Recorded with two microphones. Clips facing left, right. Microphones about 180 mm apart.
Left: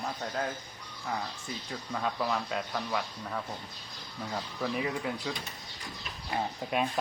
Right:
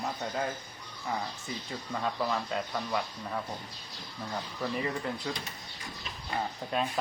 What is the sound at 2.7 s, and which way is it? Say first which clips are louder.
A man's voice: right 1 dB; 5° right (ahead or behind).